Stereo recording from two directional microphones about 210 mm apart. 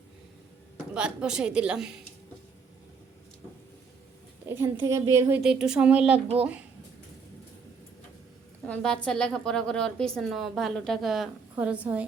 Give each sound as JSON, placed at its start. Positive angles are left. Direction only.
{"t": 0.9, "sound": "a woman's voice", "side_deg": -5}
{"t": 4.4, "sound": "a woman's voice", "side_deg": -10}
{"t": 6.1, "sound": "speech", "side_deg": -30}
{"t": 8.6, "sound": "a woman's voice", "side_deg": 5}